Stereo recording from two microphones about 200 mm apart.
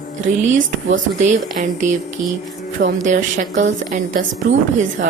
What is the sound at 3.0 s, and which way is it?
A woman's voice, 40° right (ahead or behind).